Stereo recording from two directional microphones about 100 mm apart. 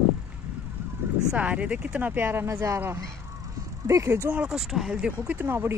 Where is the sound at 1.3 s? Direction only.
15° right (ahead or behind); by 4.3 s 30° right (ahead or behind).